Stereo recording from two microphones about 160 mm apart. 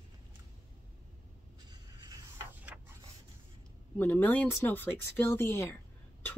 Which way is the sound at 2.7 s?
10° right (ahead or behind).